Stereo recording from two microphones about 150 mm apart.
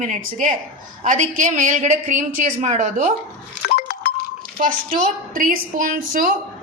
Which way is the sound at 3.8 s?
90° left.